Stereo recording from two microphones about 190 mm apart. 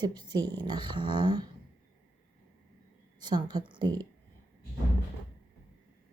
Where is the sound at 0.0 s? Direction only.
20° right (ahead or behind).